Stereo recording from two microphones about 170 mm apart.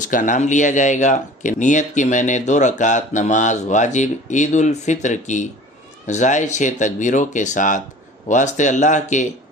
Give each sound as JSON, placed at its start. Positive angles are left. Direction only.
{"t": 0.1, "sound": "speech", "side_deg": 50}